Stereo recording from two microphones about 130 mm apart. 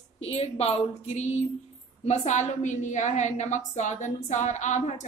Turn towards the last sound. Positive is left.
turn(degrees=65)  # may be behind; listen again after turning